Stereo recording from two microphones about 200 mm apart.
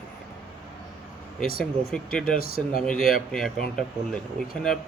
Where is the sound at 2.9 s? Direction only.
Centre (ahead or behind).